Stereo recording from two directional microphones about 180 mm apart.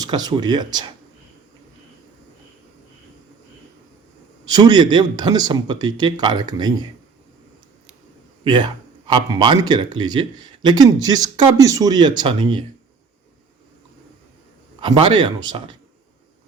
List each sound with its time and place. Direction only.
0.0 s speech: 20° right (ahead or behind)
4.4 s speech: 25° right (ahead or behind)
8.4 s speech: 25° right (ahead or behind)
14.8 s speech: 25° right (ahead or behind)